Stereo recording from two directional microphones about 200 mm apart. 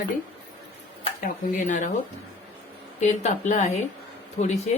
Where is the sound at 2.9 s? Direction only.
35° left (ahead or behind).